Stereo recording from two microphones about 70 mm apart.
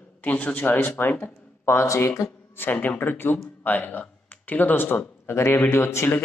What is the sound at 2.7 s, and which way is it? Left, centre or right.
A man's voice, left.